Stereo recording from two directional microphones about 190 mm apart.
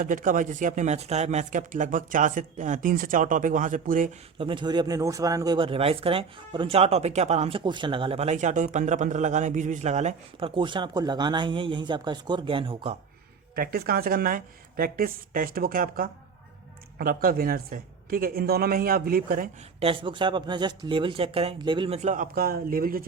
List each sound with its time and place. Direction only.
0.0 s speech: 45° right (ahead or behind)
4.4 s speech: 25° right (ahead or behind)
13.6 s speech: 55° right (ahead or behind)
19.8 s speech: 25° right (ahead or behind); by 23.0 s 50° right (ahead or behind)